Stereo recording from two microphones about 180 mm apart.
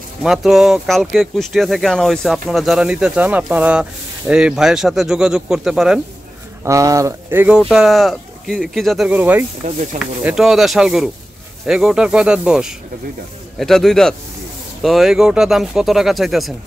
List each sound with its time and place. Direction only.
0.2 s speech: centre (ahead or behind)
6.6 s speech: 15° right (ahead or behind); by 16.5 s centre (ahead or behind)